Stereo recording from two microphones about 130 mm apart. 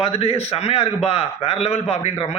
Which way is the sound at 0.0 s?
50° left (ahead or behind).